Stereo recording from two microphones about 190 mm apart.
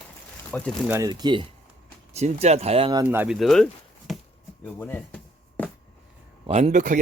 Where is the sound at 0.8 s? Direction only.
15° right (ahead or behind).